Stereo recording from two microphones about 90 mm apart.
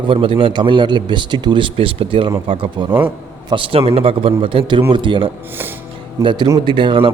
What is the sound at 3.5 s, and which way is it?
A man's voice, 75° right (ahead or behind).